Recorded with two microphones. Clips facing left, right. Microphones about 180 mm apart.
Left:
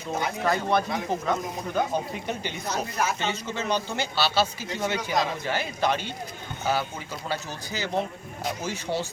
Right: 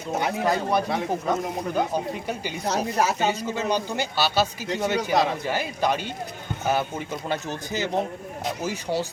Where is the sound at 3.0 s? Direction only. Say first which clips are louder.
Right 4 dB; 35° right (ahead or behind).